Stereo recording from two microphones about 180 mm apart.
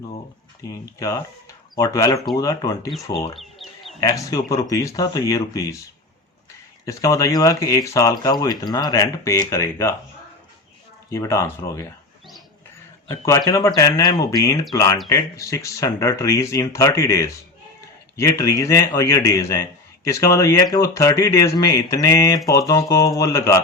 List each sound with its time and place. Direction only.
0.7 s speech: 20° left (ahead or behind)
3.3 s bird: centre (ahead or behind)
4.0 s speech: 20° left (ahead or behind)
11.1 s speech: 15° left (ahead or behind)
13.1 s speech: 15° left (ahead or behind)